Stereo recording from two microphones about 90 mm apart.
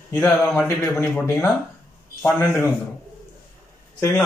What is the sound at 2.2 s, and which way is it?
Speech, 30° left (ahead or behind).